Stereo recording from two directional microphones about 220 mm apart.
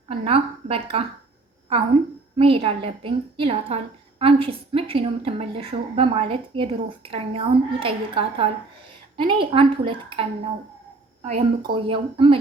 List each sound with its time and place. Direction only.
0.1 s a woman's voice: 25° right (ahead or behind)
2.3 s a woman's voice: 25° right (ahead or behind)